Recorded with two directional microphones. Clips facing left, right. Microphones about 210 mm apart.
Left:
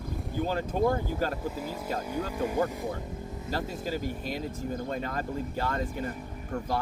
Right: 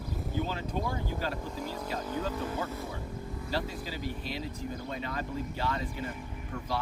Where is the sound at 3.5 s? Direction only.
45° left (ahead or behind).